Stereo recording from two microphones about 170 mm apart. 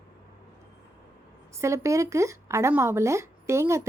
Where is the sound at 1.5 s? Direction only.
15° right (ahead or behind).